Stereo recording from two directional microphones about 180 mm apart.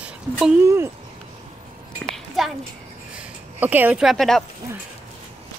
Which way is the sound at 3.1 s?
10° right (ahead or behind).